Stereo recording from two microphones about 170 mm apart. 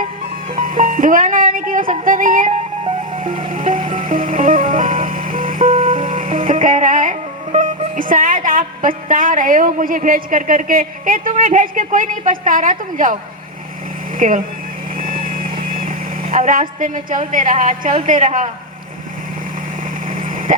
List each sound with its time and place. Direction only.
0.5 s music: 55° right (ahead or behind)
2.8 s music: 30° right (ahead or behind)
3.5 s music: 55° right (ahead or behind)
14.2 s speech: 50° right (ahead or behind)
14.9 s vehicle: 55° right (ahead or behind)
16.5 s a woman's voice: 50° right (ahead or behind)
20.1 s vehicle: 55° right (ahead or behind)